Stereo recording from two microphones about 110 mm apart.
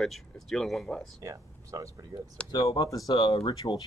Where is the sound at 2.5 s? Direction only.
35° left (ahead or behind).